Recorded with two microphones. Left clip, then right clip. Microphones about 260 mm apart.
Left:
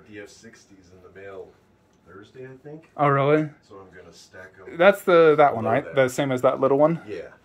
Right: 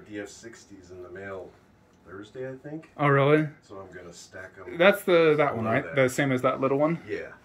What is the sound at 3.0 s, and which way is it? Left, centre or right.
Speech, centre.